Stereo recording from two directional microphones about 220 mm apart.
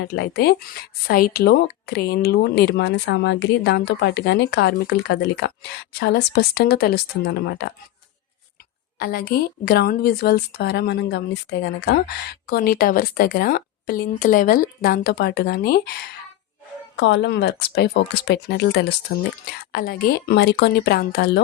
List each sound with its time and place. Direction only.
0.0 s speech: 45° left (ahead or behind)
9.0 s speech: 45° left (ahead or behind)
17.0 s speech: 55° left (ahead or behind)